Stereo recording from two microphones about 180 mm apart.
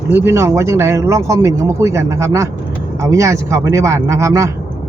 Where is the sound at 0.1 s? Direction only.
15° right (ahead or behind).